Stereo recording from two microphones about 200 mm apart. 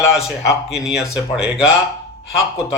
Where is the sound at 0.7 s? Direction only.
5° right (ahead or behind).